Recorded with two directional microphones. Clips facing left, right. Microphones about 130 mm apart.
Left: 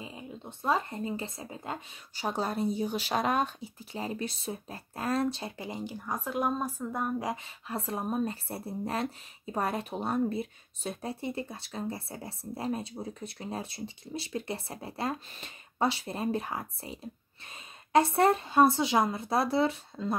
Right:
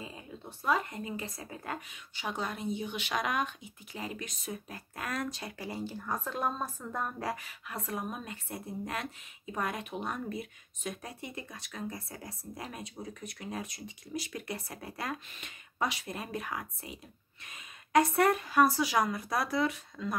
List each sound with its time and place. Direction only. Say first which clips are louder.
0.0 s speech: left 2 dB; 20° left (ahead or behind)
2.1 s speech: left 5 dB; 35° left (ahead or behind); by 7.3 s 15° left (ahead or behind)
7.4 s speech: left 4 dB; 30° left (ahead or behind)